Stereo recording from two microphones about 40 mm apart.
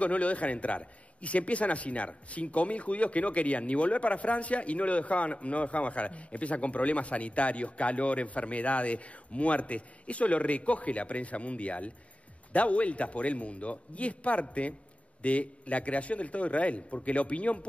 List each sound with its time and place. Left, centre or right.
0.0 s a man's voice: left